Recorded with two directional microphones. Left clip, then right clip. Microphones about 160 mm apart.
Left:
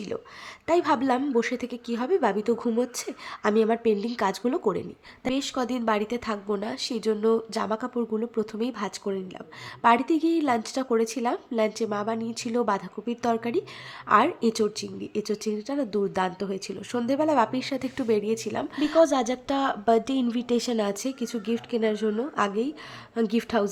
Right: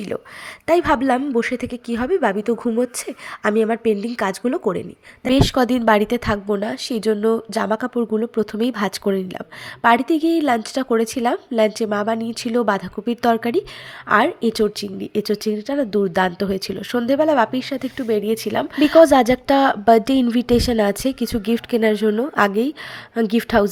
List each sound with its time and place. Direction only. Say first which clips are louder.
0.7 s a woman's voice: right 6 dB; 30° right (ahead or behind)
5.3 s a woman's voice: right 11 dB; 40° right (ahead or behind)
9.8 s a woman's voice: right 5 dB; 20° right (ahead or behind)
14.1 s a woman's voice: right 4 dB; 15° right (ahead or behind)
14.6 s a woman's voice: right 7 dB; 30° right (ahead or behind); by 18.2 s 10° right (ahead or behind)
18.2 s a woman's voice: right 7 dB; 30° right (ahead or behind)